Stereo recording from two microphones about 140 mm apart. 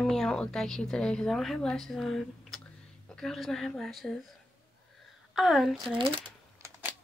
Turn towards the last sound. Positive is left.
turn(degrees=-15)  # may be behind; listen again after turning